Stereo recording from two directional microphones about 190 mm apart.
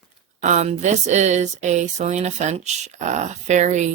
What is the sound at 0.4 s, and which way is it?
Speech, 40° right (ahead or behind).